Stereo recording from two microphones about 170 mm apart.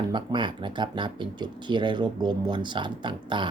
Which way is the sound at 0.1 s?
25° right (ahead or behind).